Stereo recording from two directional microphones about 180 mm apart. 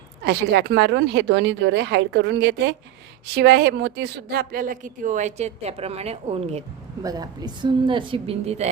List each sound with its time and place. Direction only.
0.3 s a woman's voice: 70° right (ahead or behind); by 6.7 s 35° right (ahead or behind)
7.0 s a woman's voice: 20° right (ahead or behind)